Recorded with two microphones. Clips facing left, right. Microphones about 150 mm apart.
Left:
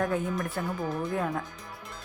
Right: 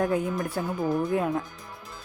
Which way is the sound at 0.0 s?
5° right (ahead or behind).